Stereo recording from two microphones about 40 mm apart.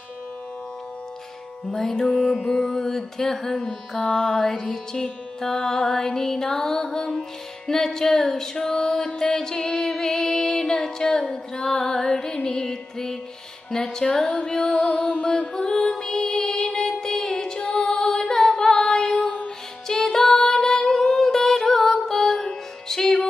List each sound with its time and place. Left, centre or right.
1.8 s carnatic music: centre
15.0 s music: left
15.6 s music: centre
19.1 s music: left
19.9 s music: centre